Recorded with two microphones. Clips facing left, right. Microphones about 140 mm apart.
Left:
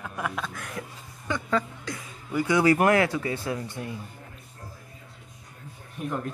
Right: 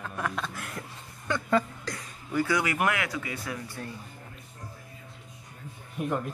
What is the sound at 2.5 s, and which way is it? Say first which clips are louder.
Speech: left 8 dB; 35° left (ahead or behind).